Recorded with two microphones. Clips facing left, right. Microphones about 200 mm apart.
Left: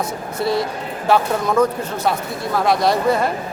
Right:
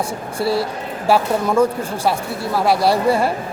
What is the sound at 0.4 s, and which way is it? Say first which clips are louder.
Speech: right 1 dB; 30° right (ahead or behind).